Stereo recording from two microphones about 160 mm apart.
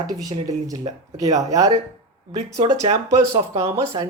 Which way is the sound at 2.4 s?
45° right (ahead or behind).